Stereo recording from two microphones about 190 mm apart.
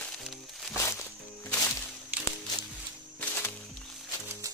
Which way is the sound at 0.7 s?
15° left (ahead or behind).